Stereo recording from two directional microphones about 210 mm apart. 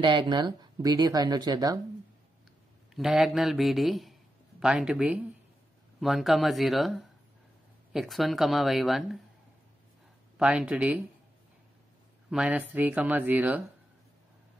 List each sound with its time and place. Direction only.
0.0 s speech: 20° right (ahead or behind)
2.9 s a man's voice: centre (ahead or behind)
10.3 s speech: 5° right (ahead or behind)
12.3 s speech: 5° right (ahead or behind)